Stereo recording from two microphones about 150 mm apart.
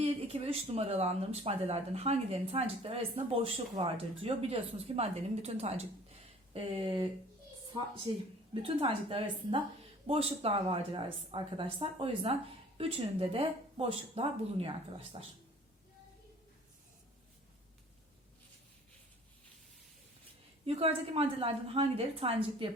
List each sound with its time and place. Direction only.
0.0 s speech: 40° right (ahead or behind)
20.7 s speech: 40° right (ahead or behind)